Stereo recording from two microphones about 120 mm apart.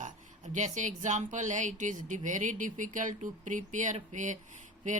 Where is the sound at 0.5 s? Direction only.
85° right.